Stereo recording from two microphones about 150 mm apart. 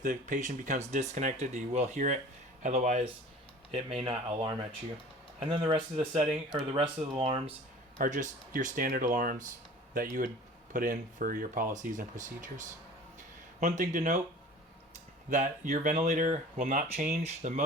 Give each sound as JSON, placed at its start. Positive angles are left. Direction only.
{"t": 0.0, "sound": "speech", "side_deg": -60}
{"t": 5.4, "sound": "speech", "side_deg": -40}
{"t": 7.9, "sound": "speech", "side_deg": -55}
{"t": 15.3, "sound": "speech", "side_deg": -55}